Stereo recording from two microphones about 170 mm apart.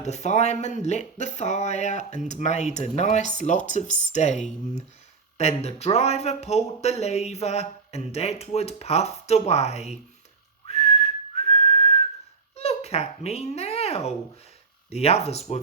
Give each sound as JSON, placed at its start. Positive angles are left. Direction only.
{"t": 0.0, "sound": "speech", "side_deg": 40}
{"t": 10.7, "sound": "whistling", "side_deg": 35}
{"t": 12.5, "sound": "babbling", "side_deg": 35}
{"t": 14.8, "sound": "speech", "side_deg": 40}